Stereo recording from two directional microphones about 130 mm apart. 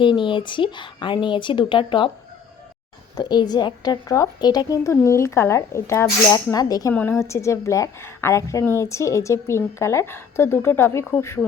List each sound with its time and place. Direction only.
0.0 s speech: 40° left (ahead or behind)
3.2 s a woman's voice: 35° left (ahead or behind)
6.9 s a woman's voice: 15° left (ahead or behind)